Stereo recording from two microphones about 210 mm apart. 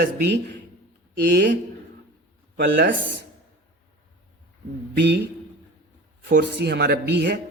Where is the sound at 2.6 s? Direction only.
55° right (ahead or behind).